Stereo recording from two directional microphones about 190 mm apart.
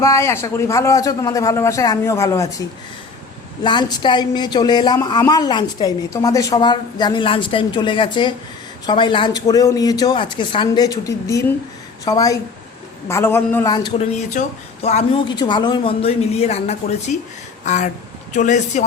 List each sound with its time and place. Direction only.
0.0 s a man's voice: 15° left (ahead or behind)
14.0 s speech: 35° left (ahead or behind)